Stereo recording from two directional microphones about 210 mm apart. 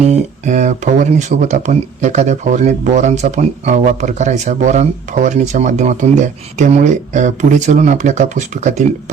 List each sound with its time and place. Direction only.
0.0 s speech: 35° right (ahead or behind)